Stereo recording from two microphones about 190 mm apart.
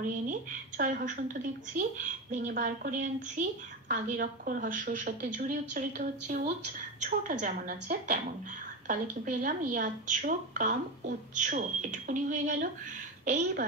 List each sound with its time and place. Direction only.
0.3 s a woman's voice: 45° right (ahead or behind)